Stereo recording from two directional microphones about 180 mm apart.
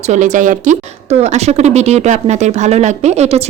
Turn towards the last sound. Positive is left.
turn(degrees=-35)  # may be behind; listen again after turning